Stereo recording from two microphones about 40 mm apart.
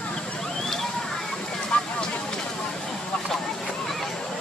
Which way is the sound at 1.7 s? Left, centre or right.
Left.